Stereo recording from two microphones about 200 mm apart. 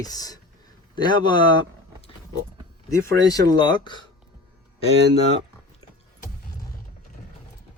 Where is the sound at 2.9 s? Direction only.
20° left (ahead or behind).